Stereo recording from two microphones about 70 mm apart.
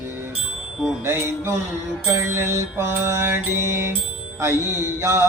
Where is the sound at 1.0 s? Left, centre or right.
Right.